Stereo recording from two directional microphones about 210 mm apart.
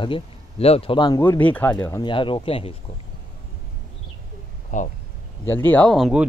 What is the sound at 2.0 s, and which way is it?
Speech, 25° left (ahead or behind).